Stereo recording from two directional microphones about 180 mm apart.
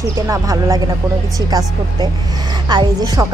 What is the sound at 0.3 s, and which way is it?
Speech, 20° right (ahead or behind).